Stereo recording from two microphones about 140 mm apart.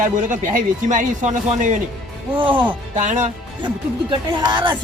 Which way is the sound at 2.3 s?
35° right (ahead or behind).